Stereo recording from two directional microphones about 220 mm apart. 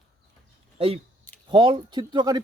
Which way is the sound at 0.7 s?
25° right (ahead or behind).